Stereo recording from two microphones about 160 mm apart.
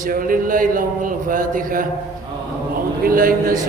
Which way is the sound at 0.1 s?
60° right (ahead or behind).